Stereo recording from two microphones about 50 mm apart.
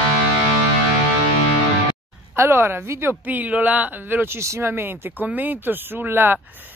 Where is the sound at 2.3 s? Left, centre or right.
Right.